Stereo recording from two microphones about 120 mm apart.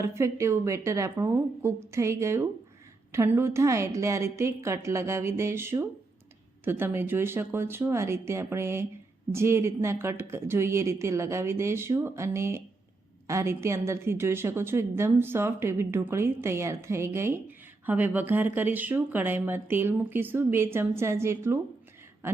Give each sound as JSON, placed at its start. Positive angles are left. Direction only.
{"t": 0.0, "sound": "a woman's voice", "side_deg": -25}